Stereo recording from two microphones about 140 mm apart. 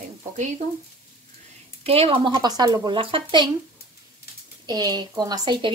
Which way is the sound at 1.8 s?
45° right (ahead or behind).